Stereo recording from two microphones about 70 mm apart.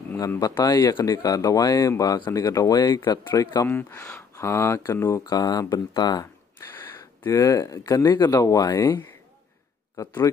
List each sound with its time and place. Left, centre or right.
0.4 s speech: left
3.6 s speech: left
4.0 s speech: left
5.2 s speech: left
6.6 s a sound: left
7.0 s speech: left